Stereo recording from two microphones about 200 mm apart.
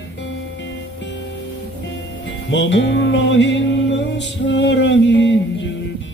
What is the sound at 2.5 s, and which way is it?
Music, 65° left (ahead or behind).